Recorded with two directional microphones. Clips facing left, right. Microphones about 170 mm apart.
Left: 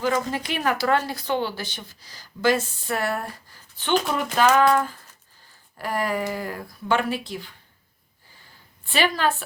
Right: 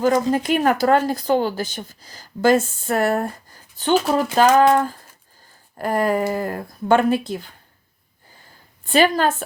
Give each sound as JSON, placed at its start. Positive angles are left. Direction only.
{"t": 0.0, "sound": "speech", "side_deg": -45}
{"t": 8.9, "sound": "speech", "side_deg": -45}